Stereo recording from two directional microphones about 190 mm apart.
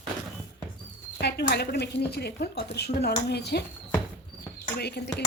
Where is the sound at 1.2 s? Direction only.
60° left (ahead or behind).